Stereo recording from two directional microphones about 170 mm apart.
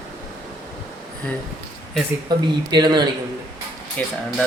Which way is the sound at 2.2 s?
25° right (ahead or behind).